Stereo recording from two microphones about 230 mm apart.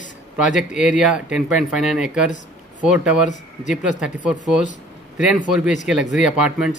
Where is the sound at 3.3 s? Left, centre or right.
Left.